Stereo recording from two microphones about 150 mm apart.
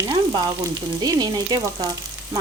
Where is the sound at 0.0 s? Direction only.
25° right (ahead or behind).